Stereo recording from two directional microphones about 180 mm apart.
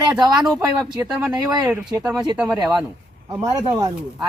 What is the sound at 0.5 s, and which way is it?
Speech, 20° right (ahead or behind).